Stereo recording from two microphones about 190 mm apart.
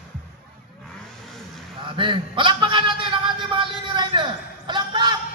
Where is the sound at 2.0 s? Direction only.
25° right (ahead or behind).